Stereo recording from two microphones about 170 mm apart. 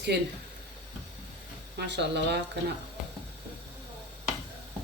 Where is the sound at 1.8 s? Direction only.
90° right.